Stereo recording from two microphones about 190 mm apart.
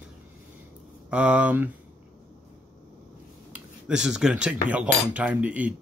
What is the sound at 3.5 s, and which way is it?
Speech, 5° right (ahead or behind).